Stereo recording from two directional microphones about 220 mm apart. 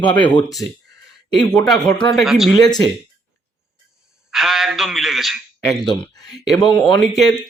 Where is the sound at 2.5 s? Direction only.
15° left (ahead or behind).